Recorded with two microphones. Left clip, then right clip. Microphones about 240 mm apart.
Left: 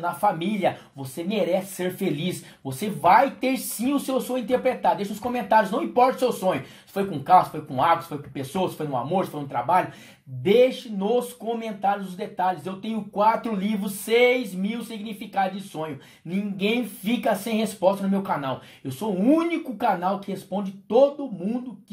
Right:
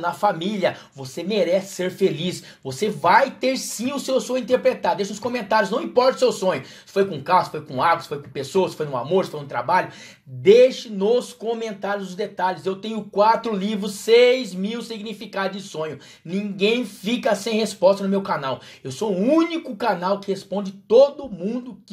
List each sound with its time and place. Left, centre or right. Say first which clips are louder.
0.0 s speech: right 2 dB; right